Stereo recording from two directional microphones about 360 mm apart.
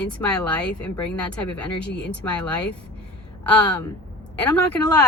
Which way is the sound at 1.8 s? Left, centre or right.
Left.